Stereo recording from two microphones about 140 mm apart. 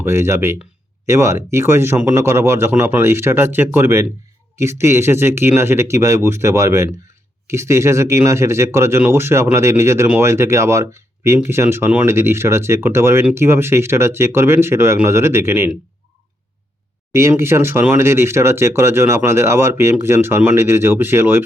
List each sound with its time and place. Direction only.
0.0 s speech: 20° right (ahead or behind)
17.1 s speech: 20° right (ahead or behind)